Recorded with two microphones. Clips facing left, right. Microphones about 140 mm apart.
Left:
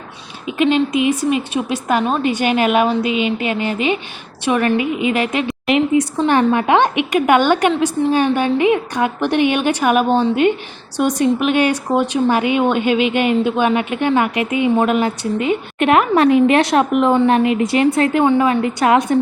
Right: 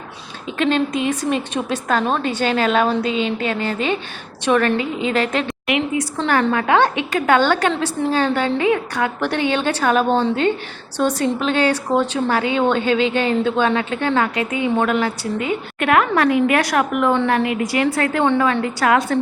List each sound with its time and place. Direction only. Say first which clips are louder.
0.4 s speech: left 3 dB; 10° left (ahead or behind)
10.1 s a woman's voice: left 2 dB; centre (ahead or behind)
10.9 s a woman's voice: left 3 dB; 15° left (ahead or behind)